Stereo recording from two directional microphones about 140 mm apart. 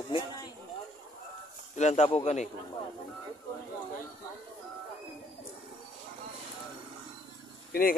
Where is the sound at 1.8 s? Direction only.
55° left (ahead or behind).